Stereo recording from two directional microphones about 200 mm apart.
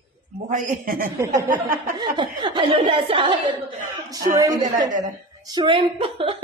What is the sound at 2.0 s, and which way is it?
A woman's voice, 20° right (ahead or behind).